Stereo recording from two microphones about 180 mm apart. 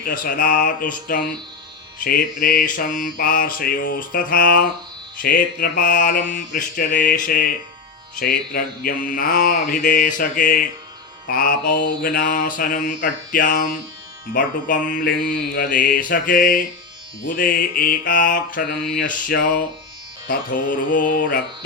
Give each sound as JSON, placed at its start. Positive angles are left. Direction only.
{"t": 0.0, "sound": "mantra", "side_deg": 50}
{"t": 4.1, "sound": "mantra", "side_deg": 50}